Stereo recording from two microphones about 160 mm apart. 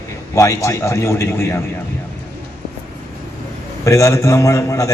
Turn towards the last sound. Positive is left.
turn(degrees=20)  # may be behind; listen again after turning